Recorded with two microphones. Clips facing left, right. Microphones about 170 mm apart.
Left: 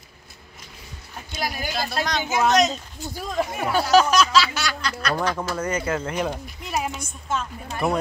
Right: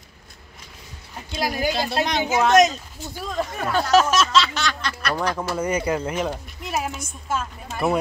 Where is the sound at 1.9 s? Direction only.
25° right (ahead or behind).